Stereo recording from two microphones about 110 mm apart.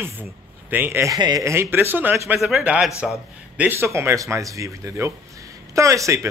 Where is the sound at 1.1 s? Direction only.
35° right (ahead or behind).